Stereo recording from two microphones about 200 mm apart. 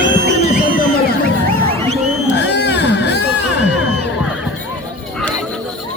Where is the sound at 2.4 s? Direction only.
55° left (ahead or behind).